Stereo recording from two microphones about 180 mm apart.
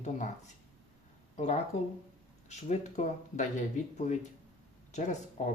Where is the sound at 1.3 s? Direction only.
40° left (ahead or behind).